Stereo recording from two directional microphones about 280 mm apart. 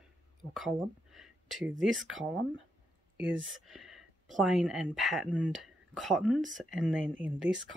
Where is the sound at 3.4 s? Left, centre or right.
Right.